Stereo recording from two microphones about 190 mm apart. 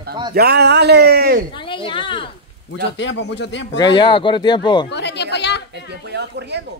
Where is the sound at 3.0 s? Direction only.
65° left (ahead or behind).